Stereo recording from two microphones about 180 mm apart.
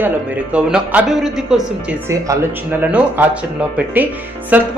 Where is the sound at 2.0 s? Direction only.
15° right (ahead or behind).